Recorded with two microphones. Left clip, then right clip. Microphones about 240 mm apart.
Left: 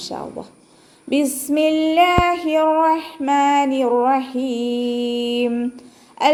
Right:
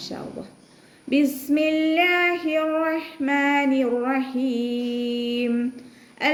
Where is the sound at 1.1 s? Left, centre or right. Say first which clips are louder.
Left 2 dB; centre.